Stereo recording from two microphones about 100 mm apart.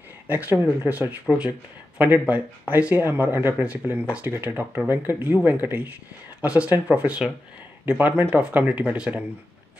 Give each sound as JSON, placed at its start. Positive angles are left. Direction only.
{"t": 0.3, "sound": "speech", "side_deg": -15}